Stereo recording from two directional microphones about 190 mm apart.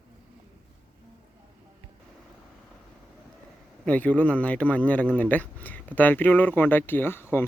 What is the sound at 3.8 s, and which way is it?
Speech, 5° left (ahead or behind).